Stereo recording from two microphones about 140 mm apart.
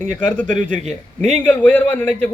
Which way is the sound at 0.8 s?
50° right (ahead or behind).